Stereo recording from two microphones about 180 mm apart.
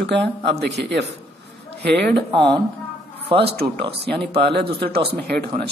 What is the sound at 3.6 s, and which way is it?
Speech, 65° right (ahead or behind).